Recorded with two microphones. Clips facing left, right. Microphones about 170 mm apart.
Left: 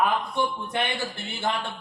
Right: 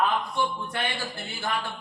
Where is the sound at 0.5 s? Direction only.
20° left (ahead or behind).